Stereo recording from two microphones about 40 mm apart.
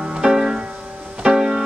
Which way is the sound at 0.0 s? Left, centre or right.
Centre.